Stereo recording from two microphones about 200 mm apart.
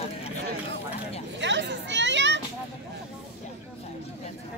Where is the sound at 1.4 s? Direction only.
60° right (ahead or behind).